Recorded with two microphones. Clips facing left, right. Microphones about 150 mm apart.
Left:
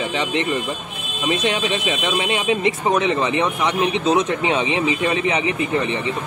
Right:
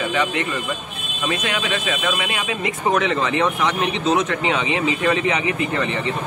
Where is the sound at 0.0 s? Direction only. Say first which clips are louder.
Even; 25° left (ahead or behind).